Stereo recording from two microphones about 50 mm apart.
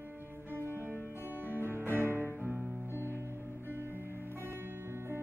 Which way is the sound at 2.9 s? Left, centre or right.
Left.